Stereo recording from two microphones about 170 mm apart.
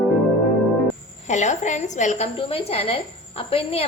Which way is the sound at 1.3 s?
45° left (ahead or behind).